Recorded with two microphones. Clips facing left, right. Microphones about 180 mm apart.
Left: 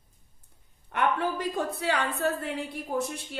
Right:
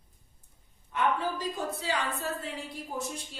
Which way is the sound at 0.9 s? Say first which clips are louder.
Left 2 dB; 60° left (ahead or behind).